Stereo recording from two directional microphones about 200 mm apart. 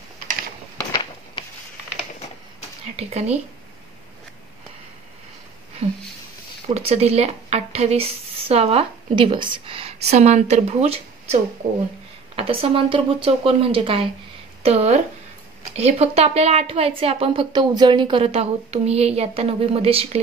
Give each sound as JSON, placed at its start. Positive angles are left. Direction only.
{"t": 3.0, "sound": "speech", "side_deg": -30}
{"t": 5.8, "sound": "speech", "side_deg": -30}
{"t": 12.4, "sound": "a woman's voice", "side_deg": -30}